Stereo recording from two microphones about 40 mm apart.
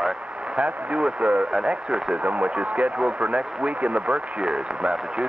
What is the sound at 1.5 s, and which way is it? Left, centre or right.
Speech, centre.